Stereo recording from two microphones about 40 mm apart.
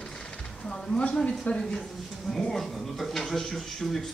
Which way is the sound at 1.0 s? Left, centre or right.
Left.